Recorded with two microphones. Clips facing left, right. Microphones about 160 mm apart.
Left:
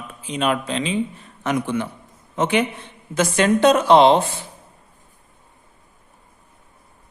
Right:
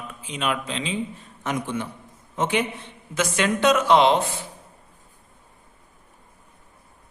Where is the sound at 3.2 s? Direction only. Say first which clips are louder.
Left 6 dB; 35° left (ahead or behind).